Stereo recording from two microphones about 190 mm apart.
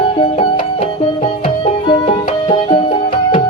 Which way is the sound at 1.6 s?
30° left (ahead or behind).